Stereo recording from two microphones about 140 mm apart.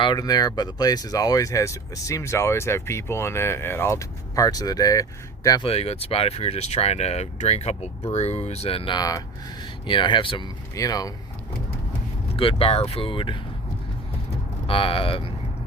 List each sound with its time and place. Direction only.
0.0 s speech: 30° left (ahead or behind)
5.6 s speech: 45° left (ahead or behind)
9.0 s speech: 25° left (ahead or behind)
9.8 s speech: 35° left (ahead or behind)
12.4 s speech: 40° left (ahead or behind)
14.7 s speech: 40° left (ahead or behind)